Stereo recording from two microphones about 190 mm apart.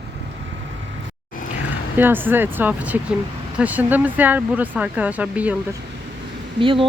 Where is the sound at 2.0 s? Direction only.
10° right (ahead or behind).